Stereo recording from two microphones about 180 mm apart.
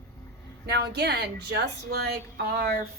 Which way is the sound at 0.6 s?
65° right (ahead or behind).